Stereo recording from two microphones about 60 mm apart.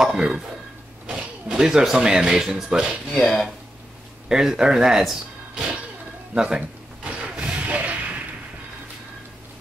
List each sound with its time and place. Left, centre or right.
0.0 s speech: centre
3.1 s speech: centre
4.3 s speech: centre
6.3 s a sound: centre